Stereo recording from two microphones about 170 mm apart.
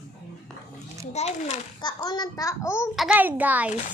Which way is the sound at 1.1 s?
40° left (ahead or behind).